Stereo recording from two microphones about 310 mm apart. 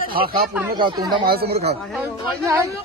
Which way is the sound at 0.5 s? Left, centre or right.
Centre.